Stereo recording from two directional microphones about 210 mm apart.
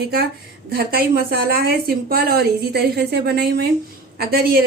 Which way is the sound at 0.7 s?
45° right (ahead or behind).